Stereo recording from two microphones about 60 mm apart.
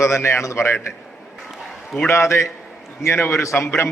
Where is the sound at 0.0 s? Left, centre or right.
Left.